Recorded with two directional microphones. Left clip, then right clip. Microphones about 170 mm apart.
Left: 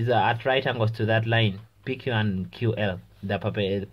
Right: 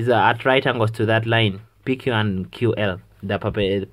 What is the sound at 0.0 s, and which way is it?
Speech, 30° right (ahead or behind).